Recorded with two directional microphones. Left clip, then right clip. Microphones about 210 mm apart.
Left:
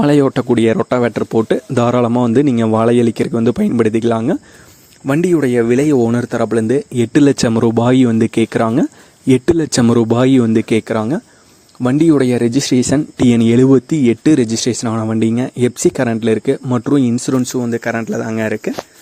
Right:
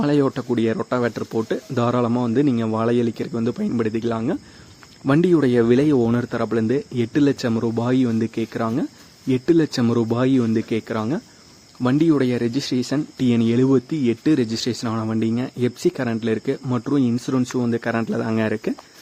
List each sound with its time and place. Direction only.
0.0 s speech: 35° left (ahead or behind)
5.0 s speech: 5° left (ahead or behind); by 17.4 s 30° left (ahead or behind)
17.4 s speech: 15° left (ahead or behind)